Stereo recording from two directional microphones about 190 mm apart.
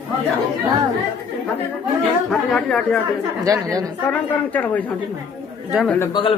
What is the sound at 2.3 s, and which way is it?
Speech, centre (ahead or behind).